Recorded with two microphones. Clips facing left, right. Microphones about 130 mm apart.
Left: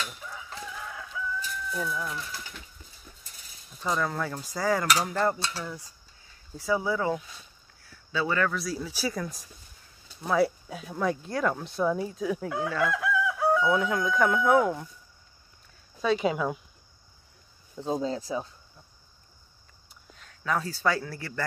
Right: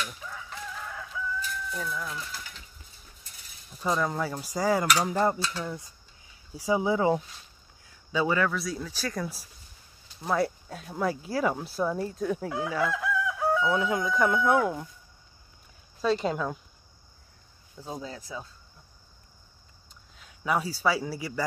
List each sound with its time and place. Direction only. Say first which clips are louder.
1.7 s speech: left 5 dB; 5° left (ahead or behind)
3.8 s speech: right 1 dB; 15° right (ahead or behind); by 9.2 s 10° left (ahead or behind)
9.2 s speech: right 1 dB; 5° right (ahead or behind)
12.6 s chicken: left 1 dB; 5° right (ahead or behind)
16.0 s speech: left 1 dB; 5° left (ahead or behind)
17.7 s speech: left 9 dB; 25° left (ahead or behind)
20.2 s speech: right 1 dB; 10° right (ahead or behind)